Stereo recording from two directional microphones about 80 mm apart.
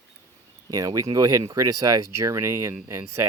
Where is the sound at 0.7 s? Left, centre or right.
Right.